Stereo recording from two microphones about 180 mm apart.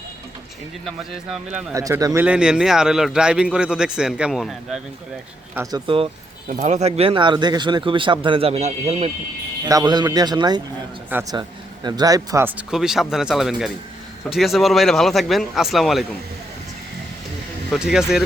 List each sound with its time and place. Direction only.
0.9 s a man's voice: centre (ahead or behind)
1.7 s speech: 20° right (ahead or behind)
2.2 s a man's voice: 5° right (ahead or behind)
5.7 s speech: 30° right (ahead or behind)
6.5 s speech: 45° right (ahead or behind)
9.6 s a man's voice: 20° right (ahead or behind); by 16.0 s centre (ahead or behind)
17.7 s a man's voice: 5° right (ahead or behind)